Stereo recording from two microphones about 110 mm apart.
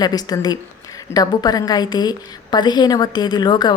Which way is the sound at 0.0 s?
35° left (ahead or behind).